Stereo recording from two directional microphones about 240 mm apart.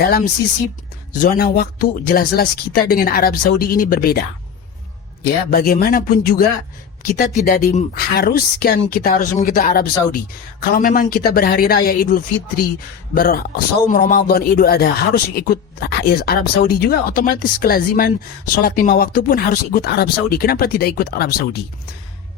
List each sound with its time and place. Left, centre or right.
0.0 s speech: left
5.2 s speech: left